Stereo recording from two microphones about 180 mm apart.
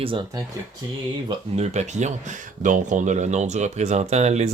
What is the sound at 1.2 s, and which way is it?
Speech, 40° right (ahead or behind).